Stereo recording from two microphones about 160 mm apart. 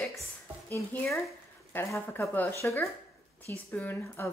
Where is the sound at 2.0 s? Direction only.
15° left (ahead or behind).